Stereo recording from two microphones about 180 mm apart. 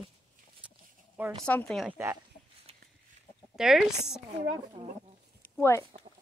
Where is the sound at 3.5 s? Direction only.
5° right (ahead or behind).